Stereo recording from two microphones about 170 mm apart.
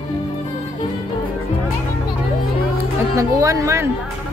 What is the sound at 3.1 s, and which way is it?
Speech, 20° right (ahead or behind).